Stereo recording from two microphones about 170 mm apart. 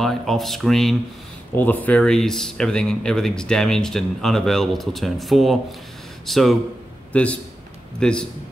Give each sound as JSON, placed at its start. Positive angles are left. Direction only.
{"t": 0.0, "sound": "a man's voice", "side_deg": 0}